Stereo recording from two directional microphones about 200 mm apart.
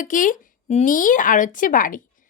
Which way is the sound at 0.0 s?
40° left (ahead or behind).